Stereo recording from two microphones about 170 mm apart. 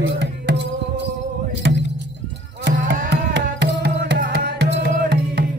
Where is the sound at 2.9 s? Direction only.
90° right.